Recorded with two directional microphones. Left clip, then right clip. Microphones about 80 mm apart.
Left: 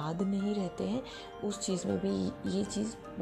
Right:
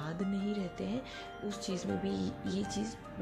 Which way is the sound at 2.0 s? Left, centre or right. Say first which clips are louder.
Left 3 dB; left.